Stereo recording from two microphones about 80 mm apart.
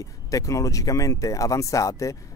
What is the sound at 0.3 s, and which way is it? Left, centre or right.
Speech, left.